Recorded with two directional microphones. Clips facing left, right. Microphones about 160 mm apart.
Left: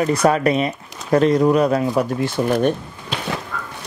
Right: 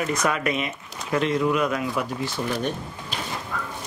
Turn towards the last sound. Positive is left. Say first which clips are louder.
# left 6 dB
turn(degrees=70)  # may be behind; listen again after turning